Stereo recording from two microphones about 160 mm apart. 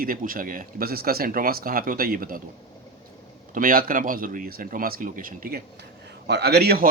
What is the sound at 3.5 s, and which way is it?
Speech, 60° right (ahead or behind).